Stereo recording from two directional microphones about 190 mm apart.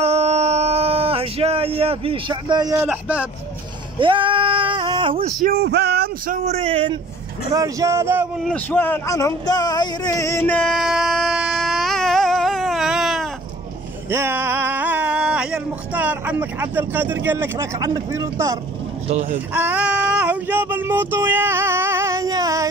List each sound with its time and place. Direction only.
0.0 s a sound: 35° right (ahead or behind); by 3.3 s 10° right (ahead or behind)
4.0 s female singing: 25° right (ahead or behind)
5.4 s a sound: 55° right (ahead or behind)
6.4 s a man's voice: 30° right (ahead or behind)
7.5 s speech: 15° right (ahead or behind)
8.5 s a sound: 10° left (ahead or behind)
14.1 s speech: 10° right (ahead or behind)
19.0 s speech: 35° right (ahead or behind)
19.5 s child singing: 10° right (ahead or behind)